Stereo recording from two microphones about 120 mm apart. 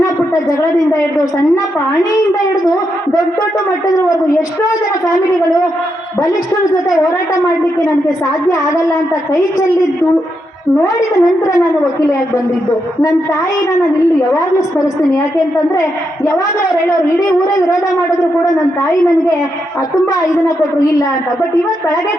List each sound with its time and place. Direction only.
3.8 s a woman's voice: 30° left (ahead or behind)
8.4 s a woman's voice: 30° left (ahead or behind)
14.2 s a woman's voice: 30° left (ahead or behind)
20.2 s a woman's voice: 25° left (ahead or behind)